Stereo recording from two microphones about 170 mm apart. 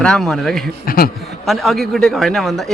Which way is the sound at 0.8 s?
60° left (ahead or behind).